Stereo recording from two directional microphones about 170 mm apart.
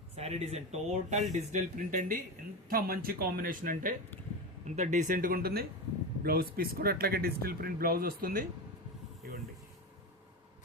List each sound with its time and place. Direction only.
0.2 s speech: 40° right (ahead or behind); by 3.9 s 55° right (ahead or behind)
4.6 s speech: 45° right (ahead or behind); by 8.4 s 60° right (ahead or behind)